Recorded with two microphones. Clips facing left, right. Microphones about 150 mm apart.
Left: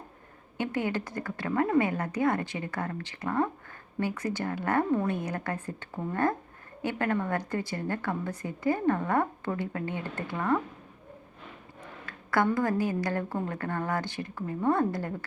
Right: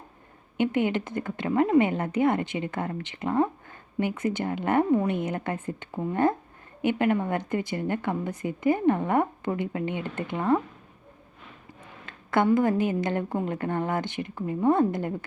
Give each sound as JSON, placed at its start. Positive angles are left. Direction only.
{"t": 0.5, "sound": "a woman's voice", "side_deg": -20}
{"t": 12.0, "sound": "a sound", "side_deg": -20}
{"t": 12.5, "sound": "a woman's voice", "side_deg": -20}